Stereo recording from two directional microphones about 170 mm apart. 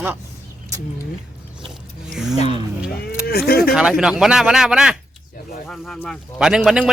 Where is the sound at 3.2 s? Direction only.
65° left (ahead or behind).